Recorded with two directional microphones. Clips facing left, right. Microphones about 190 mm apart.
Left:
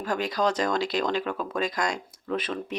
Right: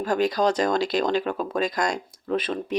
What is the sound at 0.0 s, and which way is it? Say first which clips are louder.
Speech: right 4 dB; 40° right (ahead or behind).